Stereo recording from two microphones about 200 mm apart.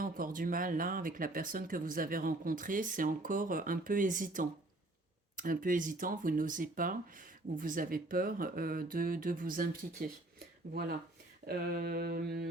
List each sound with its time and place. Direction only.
0.0 s speech: 45° right (ahead or behind)
11.4 s speech: 50° right (ahead or behind)